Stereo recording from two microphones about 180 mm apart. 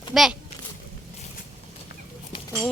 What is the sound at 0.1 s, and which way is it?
Speech, centre (ahead or behind).